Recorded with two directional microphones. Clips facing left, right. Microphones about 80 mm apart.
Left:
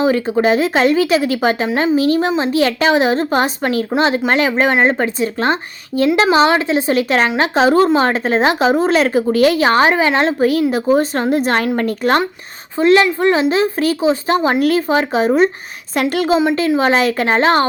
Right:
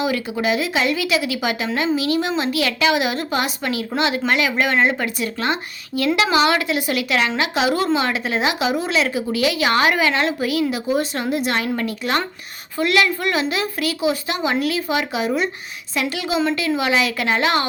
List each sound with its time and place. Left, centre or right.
0.0 s a woman's voice: left
12.8 s a woman's voice: left